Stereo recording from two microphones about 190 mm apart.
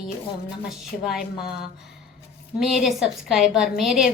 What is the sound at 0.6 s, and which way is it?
Speech, centre (ahead or behind).